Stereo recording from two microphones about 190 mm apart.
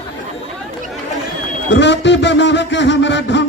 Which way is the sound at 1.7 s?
70° left (ahead or behind).